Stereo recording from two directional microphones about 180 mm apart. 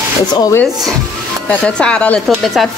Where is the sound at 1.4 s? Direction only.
5° left (ahead or behind).